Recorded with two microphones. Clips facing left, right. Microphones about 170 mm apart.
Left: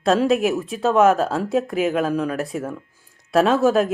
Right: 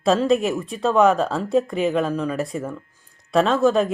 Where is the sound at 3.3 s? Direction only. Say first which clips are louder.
Left 1 dB; 10° left (ahead or behind).